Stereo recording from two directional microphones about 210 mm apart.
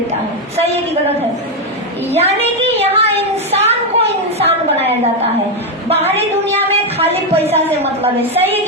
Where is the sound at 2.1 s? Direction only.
30° right (ahead or behind).